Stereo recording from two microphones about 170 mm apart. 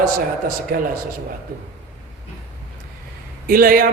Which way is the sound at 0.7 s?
60° right (ahead or behind).